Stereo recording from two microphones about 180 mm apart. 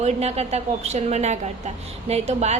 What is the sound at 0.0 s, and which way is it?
A woman's voice, 35° right (ahead or behind).